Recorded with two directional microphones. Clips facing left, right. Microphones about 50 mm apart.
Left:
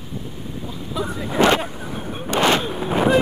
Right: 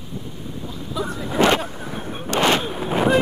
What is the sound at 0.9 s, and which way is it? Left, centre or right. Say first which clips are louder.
Speech: left 1 dB; centre.